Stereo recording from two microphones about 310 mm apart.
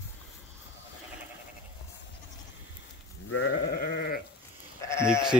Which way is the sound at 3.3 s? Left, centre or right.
Left.